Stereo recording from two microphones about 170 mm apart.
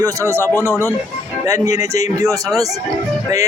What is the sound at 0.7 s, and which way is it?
Speech, 15° left (ahead or behind).